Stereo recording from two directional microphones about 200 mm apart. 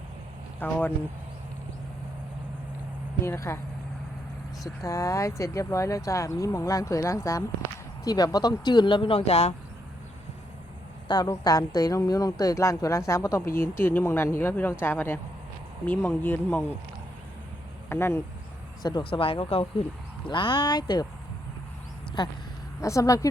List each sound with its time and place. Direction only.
0.6 s speech: 10° left (ahead or behind)
3.2 s speech: 15° left (ahead or behind)
4.6 s speech: 15° left (ahead or behind)
11.1 s speech: 20° left (ahead or behind)
17.8 s speech: 10° left (ahead or behind)
22.2 s speech: 20° left (ahead or behind)